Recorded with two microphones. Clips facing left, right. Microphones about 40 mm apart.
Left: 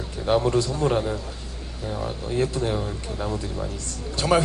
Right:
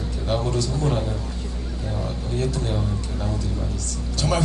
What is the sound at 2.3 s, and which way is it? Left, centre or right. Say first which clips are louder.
A woman's voice: left 2 dB; left.